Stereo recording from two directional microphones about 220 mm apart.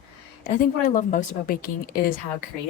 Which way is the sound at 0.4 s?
40° left (ahead or behind).